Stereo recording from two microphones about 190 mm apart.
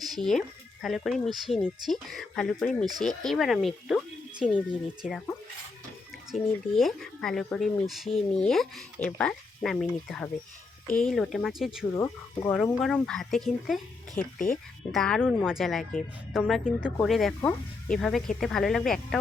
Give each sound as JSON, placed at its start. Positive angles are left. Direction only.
{"t": 0.0, "sound": "a woman's voice", "side_deg": 0}
{"t": 6.3, "sound": "a woman's voice", "side_deg": 0}
{"t": 11.9, "sound": "speech", "side_deg": 15}
{"t": 12.8, "sound": "a woman's voice", "side_deg": 0}
{"t": 14.2, "sound": "speech", "side_deg": 45}
{"t": 14.9, "sound": "a woman's voice", "side_deg": 0}